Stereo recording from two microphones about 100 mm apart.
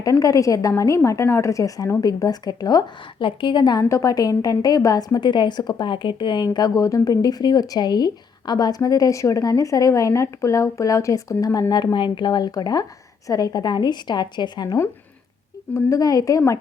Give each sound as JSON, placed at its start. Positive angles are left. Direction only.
{"t": 0.0, "sound": "a woman's voice", "side_deg": 35}
{"t": 3.2, "sound": "a woman's voice", "side_deg": 60}
{"t": 3.8, "sound": "a woman's voice", "side_deg": 30}
{"t": 11.7, "sound": "a woman's voice", "side_deg": 45}
{"t": 15.7, "sound": "a woman's voice", "side_deg": 35}